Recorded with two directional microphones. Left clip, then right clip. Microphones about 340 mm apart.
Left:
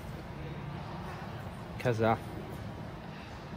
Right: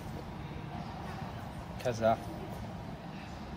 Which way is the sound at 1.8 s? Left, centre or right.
Left.